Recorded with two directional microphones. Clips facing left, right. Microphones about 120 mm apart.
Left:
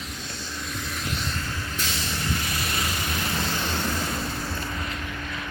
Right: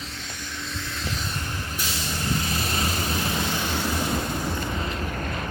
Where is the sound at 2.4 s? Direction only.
30° right (ahead or behind).